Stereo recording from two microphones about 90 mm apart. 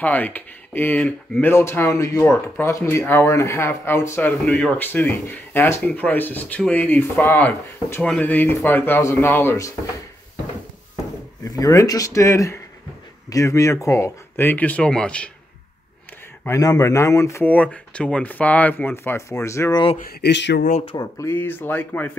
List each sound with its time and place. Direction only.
0.0 s speech: 20° left (ahead or behind)
1.5 s speech: 30° left (ahead or behind)
4.3 s speech: 15° left (ahead or behind)
11.4 s speech: 40° left (ahead or behind); by 15.3 s 15° left (ahead or behind)
16.4 s speech: 40° left (ahead or behind)
17.5 s speech: 15° left (ahead or behind)
19.1 s speech: 35° left (ahead or behind)
19.7 s speech: 65° left (ahead or behind)
21.0 s speech: 30° left (ahead or behind)